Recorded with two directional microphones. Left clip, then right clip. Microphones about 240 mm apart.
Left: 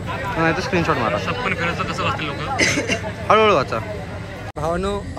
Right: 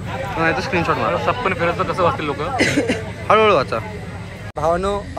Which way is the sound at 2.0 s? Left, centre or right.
Left.